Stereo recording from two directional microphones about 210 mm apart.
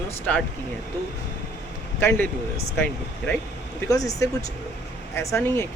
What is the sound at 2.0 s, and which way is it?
Speech, 10° left (ahead or behind).